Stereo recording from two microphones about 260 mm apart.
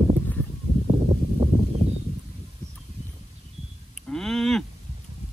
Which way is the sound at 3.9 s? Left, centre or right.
Centre.